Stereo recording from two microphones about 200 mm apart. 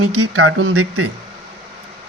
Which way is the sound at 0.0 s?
90° right.